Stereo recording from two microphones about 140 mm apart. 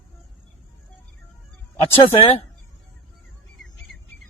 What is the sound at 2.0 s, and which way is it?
Speech, 45° left (ahead or behind).